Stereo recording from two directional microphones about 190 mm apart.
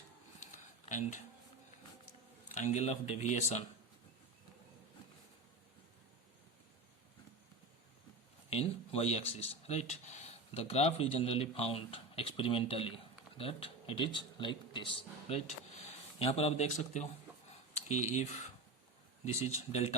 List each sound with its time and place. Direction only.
0.3 s a sound: 40° left (ahead or behind)
2.6 s speech: 40° left (ahead or behind)
8.4 s speech: 35° left (ahead or behind)